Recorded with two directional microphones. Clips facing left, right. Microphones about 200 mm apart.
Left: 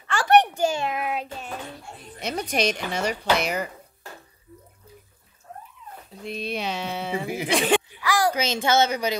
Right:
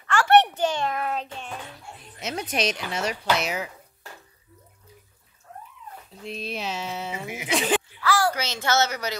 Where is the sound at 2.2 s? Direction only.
5° right (ahead or behind).